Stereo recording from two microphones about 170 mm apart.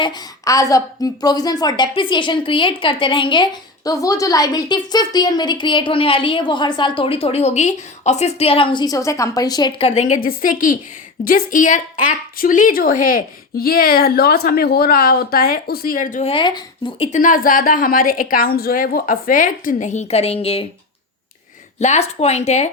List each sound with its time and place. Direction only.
0.0 s a woman's voice: 20° left (ahead or behind); by 16.3 s 50° left (ahead or behind)
16.3 s a woman's voice: 30° left (ahead or behind)
17.1 s a woman's voice: 50° left (ahead or behind)
21.8 s speech: 40° left (ahead or behind)